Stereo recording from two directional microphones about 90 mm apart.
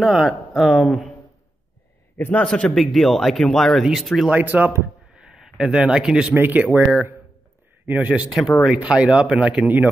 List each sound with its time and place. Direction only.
0.0 s speech: 5° right (ahead or behind)
2.1 s a man's voice: 15° left (ahead or behind); by 4.3 s centre (ahead or behind)
4.3 s speech: 20° right (ahead or behind)
5.1 s a man's voice: 10° right (ahead or behind)
8.3 s speech: 5° right (ahead or behind)